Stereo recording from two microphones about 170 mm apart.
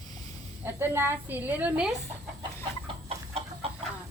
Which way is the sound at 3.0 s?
35° right (ahead or behind).